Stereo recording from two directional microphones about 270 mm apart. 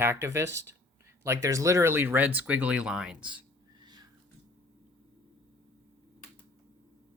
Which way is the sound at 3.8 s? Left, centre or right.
Centre.